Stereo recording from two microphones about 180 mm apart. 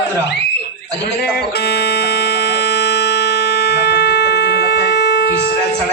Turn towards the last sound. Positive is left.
turn(degrees=65)  # may be behind; listen again after turning